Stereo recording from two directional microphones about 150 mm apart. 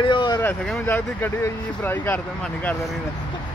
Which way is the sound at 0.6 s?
10° left (ahead or behind).